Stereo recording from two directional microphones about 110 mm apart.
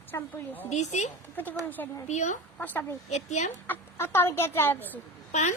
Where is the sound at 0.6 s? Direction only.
90° left.